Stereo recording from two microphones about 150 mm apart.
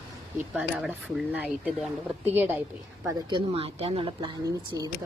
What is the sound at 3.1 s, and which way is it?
A woman's voice, 30° right (ahead or behind).